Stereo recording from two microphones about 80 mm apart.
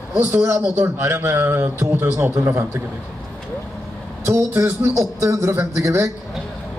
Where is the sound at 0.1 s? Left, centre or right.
Right.